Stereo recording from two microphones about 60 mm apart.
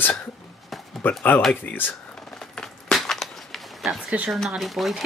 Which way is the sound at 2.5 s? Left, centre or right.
Centre.